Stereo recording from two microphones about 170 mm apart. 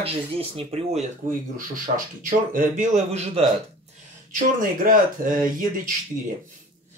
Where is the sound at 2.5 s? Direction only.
50° right (ahead or behind).